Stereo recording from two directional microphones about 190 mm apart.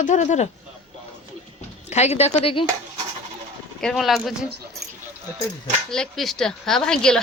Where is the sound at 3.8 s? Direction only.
Centre (ahead or behind).